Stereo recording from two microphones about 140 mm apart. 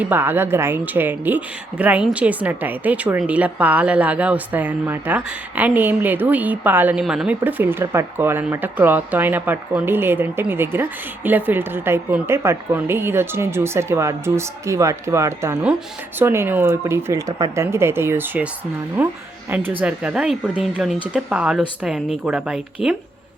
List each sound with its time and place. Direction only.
0.0 s speech: 15° right (ahead or behind)